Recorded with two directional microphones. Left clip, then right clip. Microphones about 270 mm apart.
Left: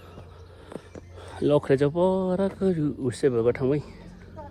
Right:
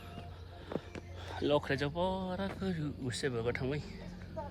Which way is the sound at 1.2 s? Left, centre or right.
Centre.